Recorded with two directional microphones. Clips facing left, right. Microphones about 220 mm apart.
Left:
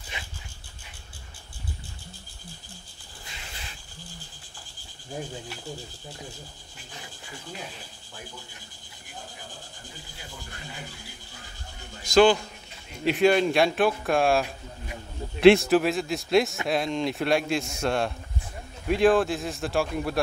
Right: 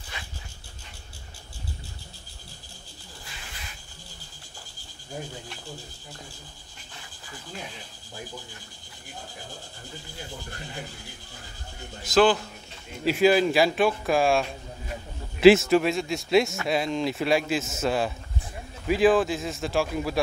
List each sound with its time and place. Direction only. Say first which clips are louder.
0.1 s dog: left 1 dB; 20° left (ahead or behind)
12.0 s a man's voice: left 2 dB; 5° right (ahead or behind)